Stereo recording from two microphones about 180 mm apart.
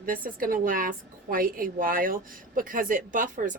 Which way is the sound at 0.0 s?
50° right (ahead or behind).